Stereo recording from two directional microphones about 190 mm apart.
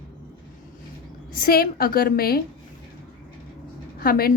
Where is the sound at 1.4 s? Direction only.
55° left (ahead or behind).